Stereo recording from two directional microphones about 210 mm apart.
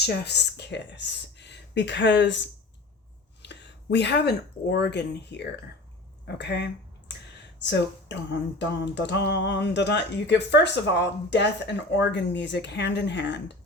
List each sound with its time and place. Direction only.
0.0 s speech: 50° left (ahead or behind)
3.4 s speech: 55° left (ahead or behind)
7.6 s a sound: 55° left (ahead or behind)